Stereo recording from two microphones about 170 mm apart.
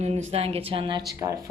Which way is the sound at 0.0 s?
40° right (ahead or behind).